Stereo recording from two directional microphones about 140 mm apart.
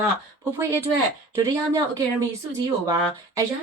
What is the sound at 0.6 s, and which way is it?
Speech, 20° right (ahead or behind).